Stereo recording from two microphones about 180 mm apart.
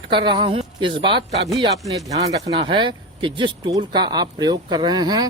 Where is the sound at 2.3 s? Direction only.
25° right (ahead or behind).